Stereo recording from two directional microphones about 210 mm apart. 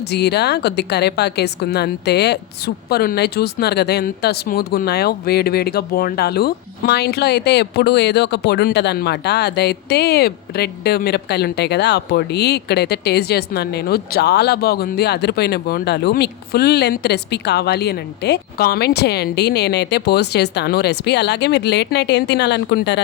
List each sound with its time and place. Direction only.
0.1 s a woman's voice: 50° left (ahead or behind)